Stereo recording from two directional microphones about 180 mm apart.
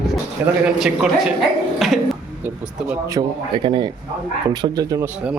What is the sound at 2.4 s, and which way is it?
Speech, 15° right (ahead or behind).